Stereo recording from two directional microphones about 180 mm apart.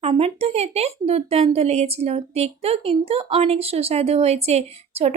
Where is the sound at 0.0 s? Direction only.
35° right (ahead or behind).